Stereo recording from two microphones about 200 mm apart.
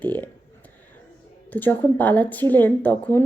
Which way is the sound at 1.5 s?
10° left (ahead or behind).